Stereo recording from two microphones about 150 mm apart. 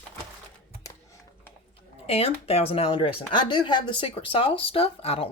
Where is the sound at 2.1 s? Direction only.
40° left (ahead or behind).